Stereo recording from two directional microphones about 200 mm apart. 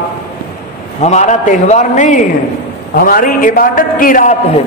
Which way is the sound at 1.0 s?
35° left (ahead or behind).